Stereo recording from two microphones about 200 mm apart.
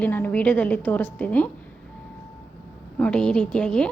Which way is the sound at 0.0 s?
10° left (ahead or behind).